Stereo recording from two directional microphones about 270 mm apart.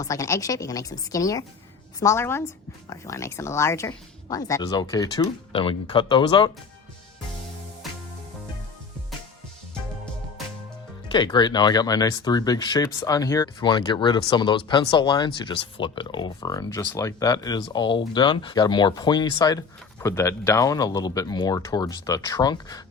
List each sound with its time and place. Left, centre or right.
0.0 s speech: centre
11.1 s speech: centre